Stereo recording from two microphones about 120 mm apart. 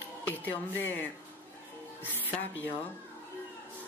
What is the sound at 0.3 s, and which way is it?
Speech, 15° left (ahead or behind).